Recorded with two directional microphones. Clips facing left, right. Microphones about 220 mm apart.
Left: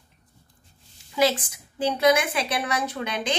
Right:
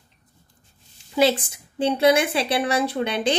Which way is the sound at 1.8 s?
30° right (ahead or behind).